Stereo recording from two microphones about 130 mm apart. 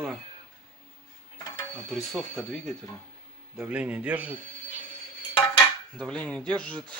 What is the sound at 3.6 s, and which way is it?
Speech, 10° right (ahead or behind).